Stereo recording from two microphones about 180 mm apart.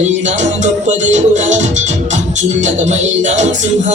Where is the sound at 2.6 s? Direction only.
40° right (ahead or behind).